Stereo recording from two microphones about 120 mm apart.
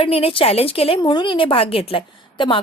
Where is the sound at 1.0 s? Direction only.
40° left (ahead or behind).